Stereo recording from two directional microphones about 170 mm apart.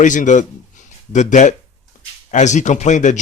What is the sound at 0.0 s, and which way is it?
A man's voice, 50° left (ahead or behind).